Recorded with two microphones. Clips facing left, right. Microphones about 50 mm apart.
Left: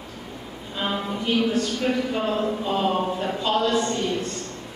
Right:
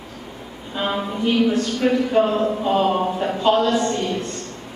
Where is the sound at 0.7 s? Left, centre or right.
Centre.